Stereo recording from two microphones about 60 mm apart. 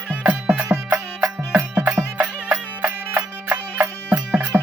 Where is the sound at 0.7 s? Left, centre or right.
Right.